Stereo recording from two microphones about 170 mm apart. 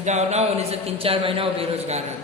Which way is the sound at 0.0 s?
45° right (ahead or behind).